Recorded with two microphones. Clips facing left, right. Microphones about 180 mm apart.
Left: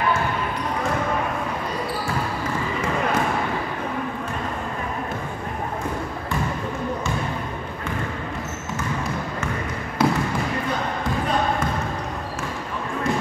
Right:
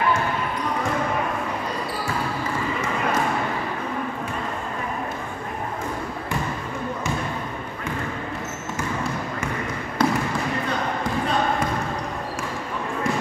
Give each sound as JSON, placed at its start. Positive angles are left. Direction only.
{"t": 10.0, "sound": "basketball bounce", "side_deg": 5}